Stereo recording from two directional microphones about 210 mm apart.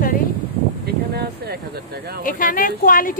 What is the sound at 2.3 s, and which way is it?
Speech, 40° left (ahead or behind).